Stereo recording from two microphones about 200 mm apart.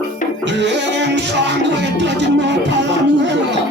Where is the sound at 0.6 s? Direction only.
60° right (ahead or behind).